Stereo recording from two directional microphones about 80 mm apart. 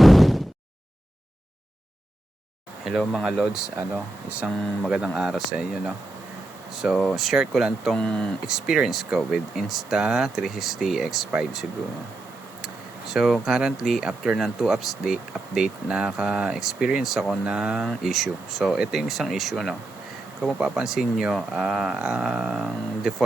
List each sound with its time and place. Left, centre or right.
0.0 s a sound: centre
2.8 s speech: centre
3.9 s speech: centre
4.4 s speech: centre
6.8 s speech: centre
7.9 s speech: centre
8.4 s speech: centre
13.1 s speech: centre